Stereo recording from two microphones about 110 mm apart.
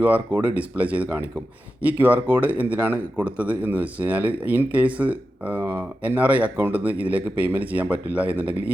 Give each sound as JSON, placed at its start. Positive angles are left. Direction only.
{"t": 0.0, "sound": "speech", "side_deg": -15}